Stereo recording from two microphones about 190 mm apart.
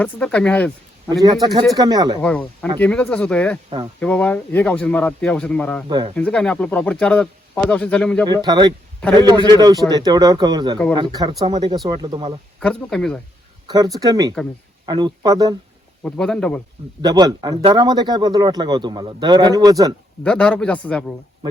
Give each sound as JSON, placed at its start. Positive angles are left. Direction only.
{"t": 0.0, "sound": "speech", "side_deg": 5}
{"t": 1.7, "sound": "speech", "side_deg": -20}
{"t": 2.2, "sound": "speech", "side_deg": 5}
{"t": 5.9, "sound": "speech", "side_deg": -25}
{"t": 6.1, "sound": "speech", "side_deg": 5}
{"t": 8.3, "sound": "speech", "side_deg": -20}
{"t": 12.5, "sound": "speech", "side_deg": 5}
{"t": 13.7, "sound": "speech", "side_deg": -20}
{"t": 16.0, "sound": "speech", "side_deg": 5}
{"t": 17.0, "sound": "speech", "side_deg": -20}
{"t": 20.2, "sound": "speech", "side_deg": 5}